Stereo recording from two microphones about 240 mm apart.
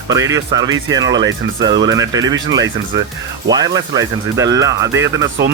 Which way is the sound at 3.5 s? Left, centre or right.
Centre.